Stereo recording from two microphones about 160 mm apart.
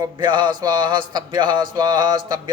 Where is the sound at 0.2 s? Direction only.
25° right (ahead or behind).